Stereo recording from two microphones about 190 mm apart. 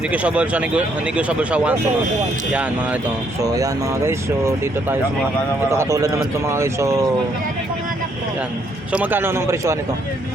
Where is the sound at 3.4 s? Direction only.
15° right (ahead or behind).